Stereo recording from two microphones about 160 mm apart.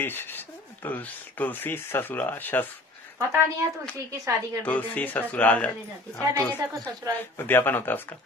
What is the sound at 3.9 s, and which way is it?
Speech, 20° right (ahead or behind).